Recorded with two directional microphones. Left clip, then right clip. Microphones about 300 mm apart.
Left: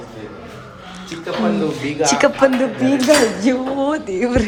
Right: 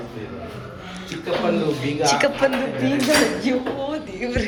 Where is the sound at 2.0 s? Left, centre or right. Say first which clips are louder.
Left 5 dB; left.